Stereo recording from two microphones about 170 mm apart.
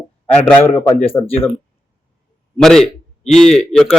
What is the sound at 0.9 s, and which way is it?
Speech, 35° left (ahead or behind).